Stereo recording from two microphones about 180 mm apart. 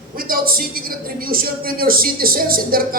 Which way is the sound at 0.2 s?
55° right (ahead or behind).